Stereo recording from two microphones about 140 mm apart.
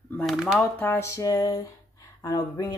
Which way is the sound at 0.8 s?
15° left (ahead or behind).